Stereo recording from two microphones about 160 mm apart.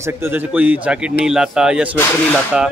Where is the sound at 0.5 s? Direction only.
10° right (ahead or behind).